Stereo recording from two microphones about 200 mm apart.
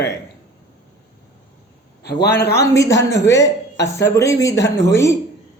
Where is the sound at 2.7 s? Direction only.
15° left (ahead or behind).